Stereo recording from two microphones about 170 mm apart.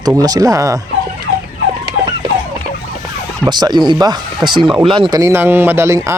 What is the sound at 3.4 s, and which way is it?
Speech, 25° right (ahead or behind).